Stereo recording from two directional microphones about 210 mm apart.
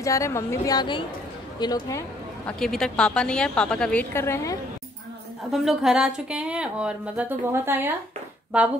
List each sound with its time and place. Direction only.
0.0 s a woman's voice: 15° left (ahead or behind)
2.6 s speech: centre (ahead or behind)
5.5 s speech: centre (ahead or behind)